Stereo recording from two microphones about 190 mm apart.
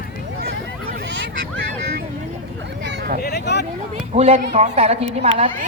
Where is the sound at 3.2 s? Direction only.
60° left (ahead or behind).